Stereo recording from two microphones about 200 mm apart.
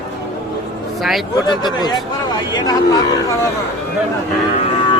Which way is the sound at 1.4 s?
20° left (ahead or behind).